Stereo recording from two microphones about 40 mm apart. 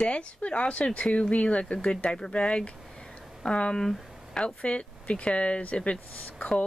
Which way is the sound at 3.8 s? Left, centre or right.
Centre.